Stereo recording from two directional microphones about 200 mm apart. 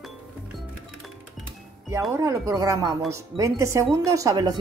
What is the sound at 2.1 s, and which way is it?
Speech, 15° right (ahead or behind).